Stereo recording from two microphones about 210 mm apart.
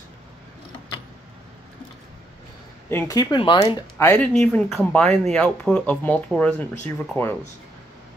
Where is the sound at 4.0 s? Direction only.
10° left (ahead or behind).